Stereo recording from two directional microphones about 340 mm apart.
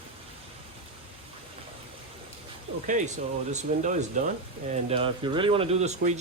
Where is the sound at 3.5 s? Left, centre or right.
Centre.